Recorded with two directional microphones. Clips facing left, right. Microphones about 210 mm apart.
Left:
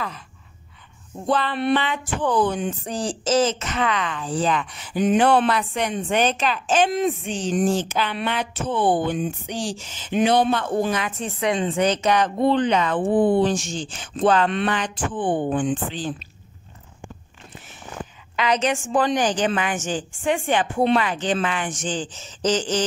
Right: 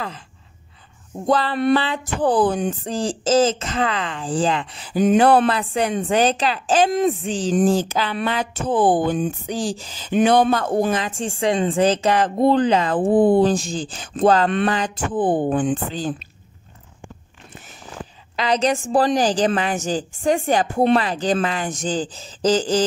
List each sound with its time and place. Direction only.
1.2 s speech: 40° right (ahead or behind)
2.9 s speech: 90° right
3.5 s speech: 30° right (ahead or behind)
7.2 s speech: 90° right
7.5 s speech: 40° right (ahead or behind)
11.0 s a woman's voice: 30° right (ahead or behind)
18.3 s speech: 35° right (ahead or behind)